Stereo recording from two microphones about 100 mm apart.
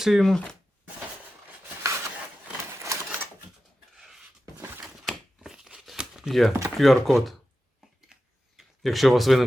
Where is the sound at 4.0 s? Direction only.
Centre (ahead or behind).